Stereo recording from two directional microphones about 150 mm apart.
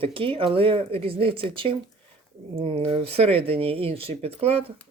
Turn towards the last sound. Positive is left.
turn(degrees=-40)  # may be behind; listen again after turning